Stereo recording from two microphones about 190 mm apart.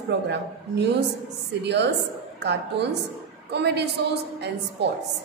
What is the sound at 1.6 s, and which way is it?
A woman's voice, 65° right (ahead or behind).